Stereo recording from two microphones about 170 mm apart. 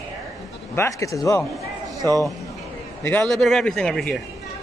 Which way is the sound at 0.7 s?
15° left (ahead or behind).